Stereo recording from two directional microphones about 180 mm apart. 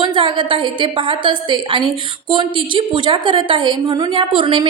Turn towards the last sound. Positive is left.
turn(degrees=-25)  # may be behind; listen again after turning